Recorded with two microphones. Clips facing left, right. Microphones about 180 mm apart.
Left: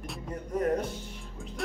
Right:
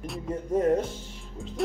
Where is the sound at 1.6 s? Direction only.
Centre (ahead or behind).